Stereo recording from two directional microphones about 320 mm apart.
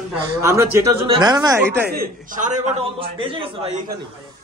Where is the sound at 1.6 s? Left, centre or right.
Right.